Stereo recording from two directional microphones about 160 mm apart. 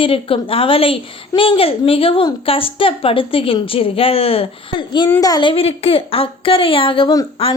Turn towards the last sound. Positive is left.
turn(degrees=30)  # may be behind; listen again after turning